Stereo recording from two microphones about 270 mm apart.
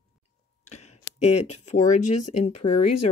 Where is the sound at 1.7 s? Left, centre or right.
Left.